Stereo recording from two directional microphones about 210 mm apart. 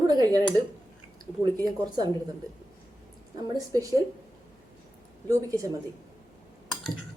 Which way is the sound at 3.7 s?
15° right (ahead or behind).